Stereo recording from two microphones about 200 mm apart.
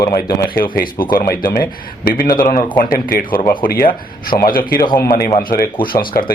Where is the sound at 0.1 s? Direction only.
50° left (ahead or behind).